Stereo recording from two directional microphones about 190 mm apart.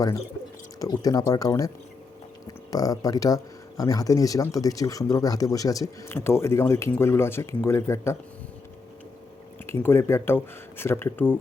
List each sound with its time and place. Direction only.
0.8 s speech: 20° left (ahead or behind)
9.6 s speech: 15° left (ahead or behind)